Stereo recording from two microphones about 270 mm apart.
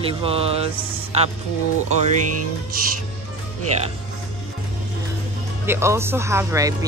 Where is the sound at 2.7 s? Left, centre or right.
Right.